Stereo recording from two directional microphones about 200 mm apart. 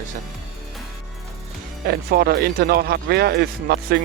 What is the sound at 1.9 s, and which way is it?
Speech, 50° right (ahead or behind).